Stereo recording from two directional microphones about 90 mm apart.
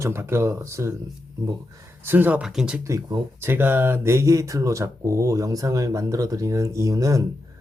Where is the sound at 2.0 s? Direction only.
20° right (ahead or behind).